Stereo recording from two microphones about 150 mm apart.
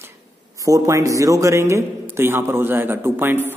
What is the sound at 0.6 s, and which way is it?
A man's voice, 20° right (ahead or behind).